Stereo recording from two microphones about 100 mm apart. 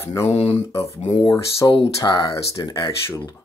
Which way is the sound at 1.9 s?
40° left (ahead or behind).